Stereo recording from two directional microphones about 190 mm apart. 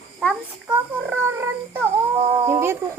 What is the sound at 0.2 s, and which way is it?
Child singing, 5° right (ahead or behind).